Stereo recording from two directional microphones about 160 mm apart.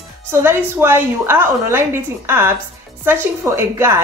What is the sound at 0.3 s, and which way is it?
A woman's voice, 15° right (ahead or behind).